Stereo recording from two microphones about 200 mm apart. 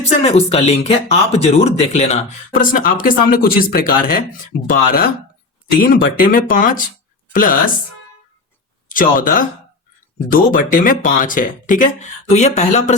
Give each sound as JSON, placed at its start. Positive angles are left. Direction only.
{"t": 0.2, "sound": "speech", "side_deg": 30}
{"t": 8.9, "sound": "speech", "side_deg": 45}